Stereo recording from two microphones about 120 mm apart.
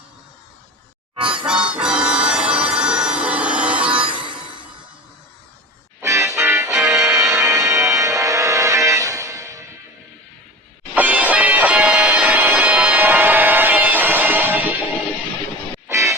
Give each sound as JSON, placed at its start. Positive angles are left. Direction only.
{"t": 1.5, "sound": "music", "side_deg": -10}
{"t": 3.8, "sound": "music", "side_deg": -45}
{"t": 6.0, "sound": "music", "side_deg": -25}
{"t": 6.7, "sound": "music", "side_deg": -5}
{"t": 7.1, "sound": "music", "side_deg": -25}
{"t": 10.9, "sound": "music", "side_deg": -15}
{"t": 15.9, "sound": "music", "side_deg": -25}